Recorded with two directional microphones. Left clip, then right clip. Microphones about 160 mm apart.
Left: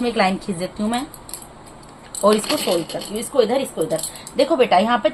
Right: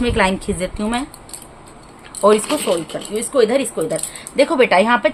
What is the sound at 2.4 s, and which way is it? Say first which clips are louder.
Speech: right 1 dB; 30° left (ahead or behind).